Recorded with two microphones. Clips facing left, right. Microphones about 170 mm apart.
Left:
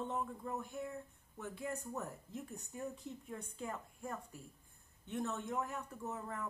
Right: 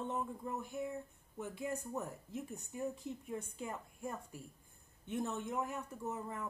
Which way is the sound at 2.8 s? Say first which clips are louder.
Right 4 dB; 15° right (ahead or behind).